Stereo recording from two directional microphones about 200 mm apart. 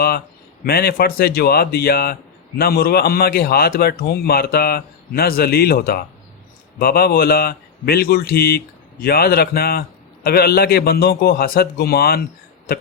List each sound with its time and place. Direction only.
0.6 s a man's voice: 50° left (ahead or behind)